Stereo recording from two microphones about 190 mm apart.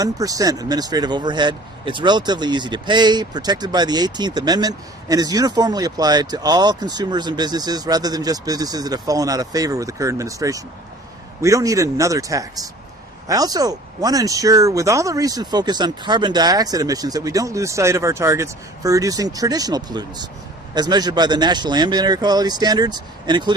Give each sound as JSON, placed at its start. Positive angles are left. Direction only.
{"t": 0.0, "sound": "speech", "side_deg": -20}